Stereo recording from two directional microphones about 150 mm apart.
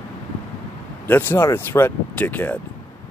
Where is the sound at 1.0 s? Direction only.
15° left (ahead or behind).